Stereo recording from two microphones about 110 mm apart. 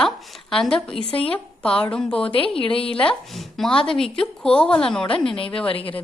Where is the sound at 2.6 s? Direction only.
55° left (ahead or behind).